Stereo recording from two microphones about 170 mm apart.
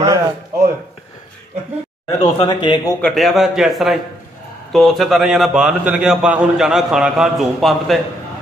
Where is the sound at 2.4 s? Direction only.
25° left (ahead or behind).